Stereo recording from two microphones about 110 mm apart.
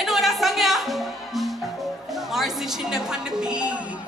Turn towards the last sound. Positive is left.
turn(degrees=-10)  # may be behind; listen again after turning